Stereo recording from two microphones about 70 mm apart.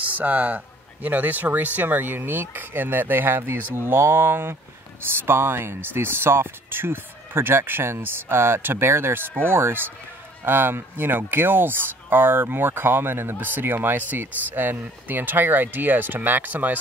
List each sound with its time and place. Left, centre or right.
0.0 s speech: right